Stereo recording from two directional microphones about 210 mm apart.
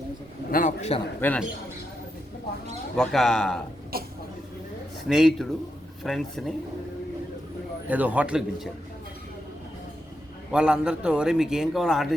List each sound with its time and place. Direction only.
0.5 s a man's voice: 35° left (ahead or behind)
1.2 s speech: 5° left (ahead or behind)
2.9 s a man's voice: centre (ahead or behind)
3.9 s speech: 45° right (ahead or behind)
5.0 s a man's voice: centre (ahead or behind)
7.9 s a man's voice: 5° right (ahead or behind)
10.5 s a man's voice: 5° right (ahead or behind)